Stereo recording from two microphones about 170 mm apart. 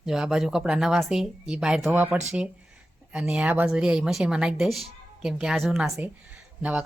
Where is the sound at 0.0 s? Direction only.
5° right (ahead or behind).